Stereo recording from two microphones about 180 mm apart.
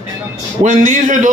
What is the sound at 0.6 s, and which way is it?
Speech, 45° right (ahead or behind).